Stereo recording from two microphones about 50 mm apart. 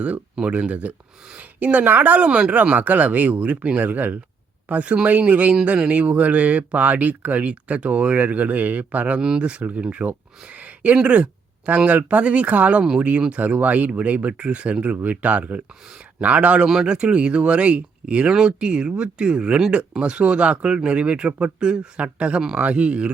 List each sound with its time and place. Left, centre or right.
0.3 s speech: right
10.5 s a sound: right
10.9 s speech: right
16.6 s speech: centre